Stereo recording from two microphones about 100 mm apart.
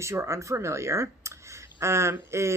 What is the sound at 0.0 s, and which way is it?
Speech, 30° right (ahead or behind).